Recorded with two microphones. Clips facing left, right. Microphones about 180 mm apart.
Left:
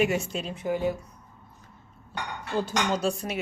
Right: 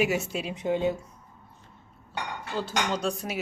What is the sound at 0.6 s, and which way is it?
Speech, 20° right (ahead or behind).